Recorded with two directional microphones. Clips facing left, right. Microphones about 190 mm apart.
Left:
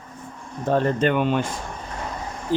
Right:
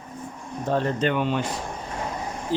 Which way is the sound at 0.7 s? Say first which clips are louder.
Left 3 dB; 50° left (ahead or behind).